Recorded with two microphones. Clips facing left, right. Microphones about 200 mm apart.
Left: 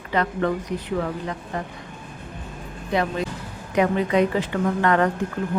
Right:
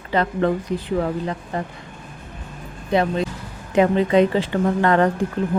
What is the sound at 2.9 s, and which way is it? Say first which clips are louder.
A woman's voice: right 4 dB; 25° right (ahead or behind).